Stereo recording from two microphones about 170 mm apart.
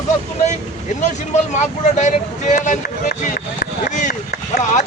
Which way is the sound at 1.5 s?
45° left (ahead or behind).